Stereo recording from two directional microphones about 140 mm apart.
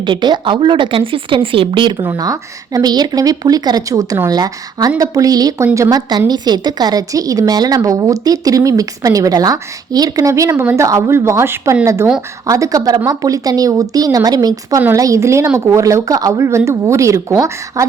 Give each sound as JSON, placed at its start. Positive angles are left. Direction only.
{"t": 0.0, "sound": "a woman's voice", "side_deg": -35}